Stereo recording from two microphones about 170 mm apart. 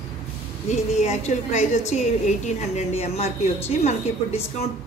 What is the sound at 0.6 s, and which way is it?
A woman's voice, 40° left (ahead or behind).